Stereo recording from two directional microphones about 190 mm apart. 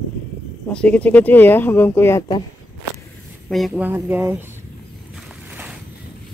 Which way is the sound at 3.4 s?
Centre (ahead or behind).